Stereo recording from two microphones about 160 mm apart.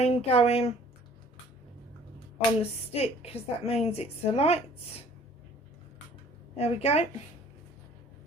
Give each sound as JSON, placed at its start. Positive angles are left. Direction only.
{"t": 0.0, "sound": "a woman's voice", "side_deg": 40}
{"t": 2.1, "sound": "a woman's voice", "side_deg": 40}
{"t": 6.7, "sound": "a woman's voice", "side_deg": 40}